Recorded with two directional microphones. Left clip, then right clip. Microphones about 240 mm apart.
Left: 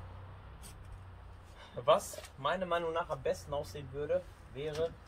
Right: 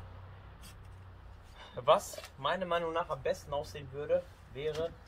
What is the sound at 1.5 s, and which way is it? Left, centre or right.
A man's voice, centre.